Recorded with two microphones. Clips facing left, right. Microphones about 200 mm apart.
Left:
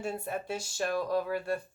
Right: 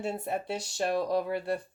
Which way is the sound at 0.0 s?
25° right (ahead or behind).